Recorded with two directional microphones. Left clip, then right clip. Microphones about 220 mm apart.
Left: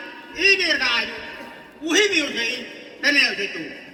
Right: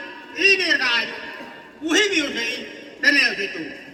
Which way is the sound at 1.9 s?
25° left (ahead or behind).